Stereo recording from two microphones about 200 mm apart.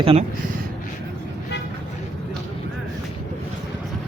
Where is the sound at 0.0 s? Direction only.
30° right (ahead or behind).